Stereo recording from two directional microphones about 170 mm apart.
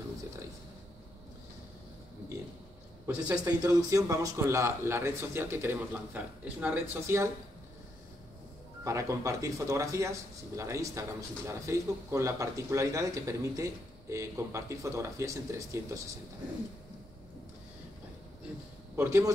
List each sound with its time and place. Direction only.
3.4 s speech: 20° right (ahead or behind)
8.8 s speech: 20° right (ahead or behind)
18.9 s speech: 15° right (ahead or behind)